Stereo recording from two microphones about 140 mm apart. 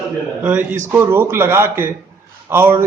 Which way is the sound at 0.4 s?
15° right (ahead or behind).